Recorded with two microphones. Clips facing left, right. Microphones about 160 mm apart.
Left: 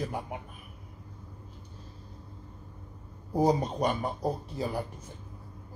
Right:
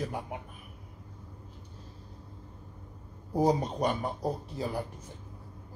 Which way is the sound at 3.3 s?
Centre (ahead or behind).